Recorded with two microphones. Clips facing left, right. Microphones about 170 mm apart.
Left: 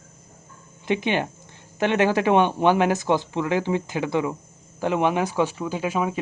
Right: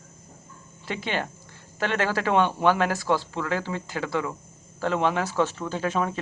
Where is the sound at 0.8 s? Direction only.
20° left (ahead or behind).